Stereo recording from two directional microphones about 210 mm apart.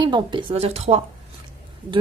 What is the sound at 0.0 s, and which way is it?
Speech, 20° right (ahead or behind).